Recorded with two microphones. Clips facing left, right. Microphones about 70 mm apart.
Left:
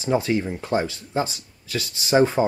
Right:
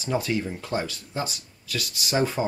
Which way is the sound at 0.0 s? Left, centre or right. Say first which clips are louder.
Left 4 dB; left.